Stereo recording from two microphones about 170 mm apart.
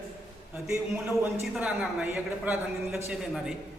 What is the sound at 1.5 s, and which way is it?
A man's voice, 5° right (ahead or behind).